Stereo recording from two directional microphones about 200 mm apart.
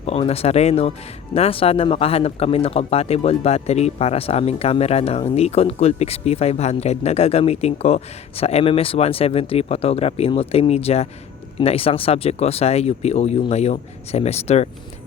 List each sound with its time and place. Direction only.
0.0 s speech: 30° left (ahead or behind)